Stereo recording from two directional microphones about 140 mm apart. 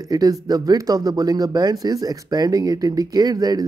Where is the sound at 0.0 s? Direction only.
25° right (ahead or behind).